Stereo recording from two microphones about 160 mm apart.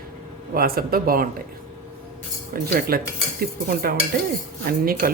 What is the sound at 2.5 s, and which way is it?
Cutlery, 65° right (ahead or behind).